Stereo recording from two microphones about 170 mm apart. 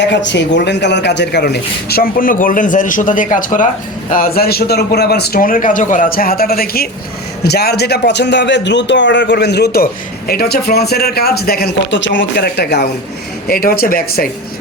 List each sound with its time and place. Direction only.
0.0 s a man's voice: 90° left; by 12.9 s 70° left (ahead or behind)
13.5 s speech: 60° left (ahead or behind)